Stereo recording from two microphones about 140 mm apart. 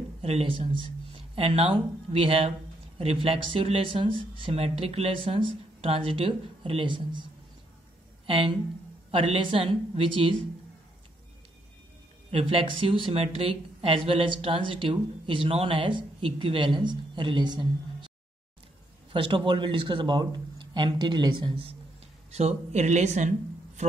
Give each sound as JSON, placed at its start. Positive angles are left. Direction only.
{"t": 0.2, "sound": "speech", "side_deg": -45}
{"t": 8.3, "sound": "speech", "side_deg": -40}
{"t": 12.3, "sound": "a woman's voice", "side_deg": -40}
{"t": 19.1, "sound": "speech", "side_deg": -35}
{"t": 22.3, "sound": "speech", "side_deg": -50}